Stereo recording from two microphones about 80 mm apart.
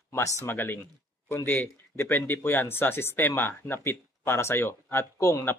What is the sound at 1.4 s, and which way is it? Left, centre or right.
Speech, left.